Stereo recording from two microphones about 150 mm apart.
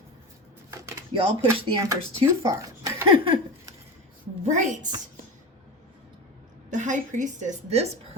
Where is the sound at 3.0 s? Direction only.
35° right (ahead or behind).